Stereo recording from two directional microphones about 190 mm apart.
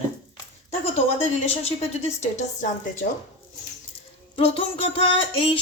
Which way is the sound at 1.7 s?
35° left (ahead or behind).